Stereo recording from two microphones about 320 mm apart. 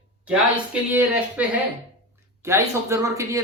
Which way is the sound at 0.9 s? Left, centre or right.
Centre.